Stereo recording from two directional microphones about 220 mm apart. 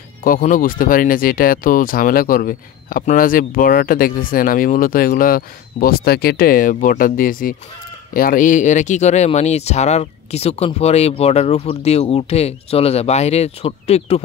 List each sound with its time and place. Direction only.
0.2 s speech: 40° left (ahead or behind)